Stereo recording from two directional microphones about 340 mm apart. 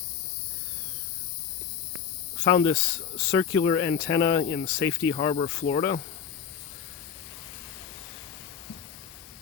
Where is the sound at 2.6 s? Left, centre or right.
Centre.